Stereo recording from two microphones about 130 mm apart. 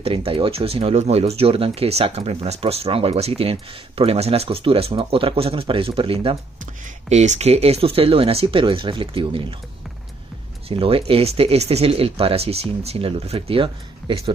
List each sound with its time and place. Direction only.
0.0 s speech: 45° right (ahead or behind)
6.6 s speech: 60° right (ahead or behind); by 9.6 s 40° right (ahead or behind)
10.7 s speech: 45° right (ahead or behind)